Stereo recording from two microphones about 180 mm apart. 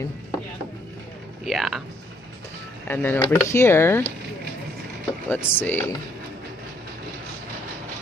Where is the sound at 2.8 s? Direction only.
10° left (ahead or behind).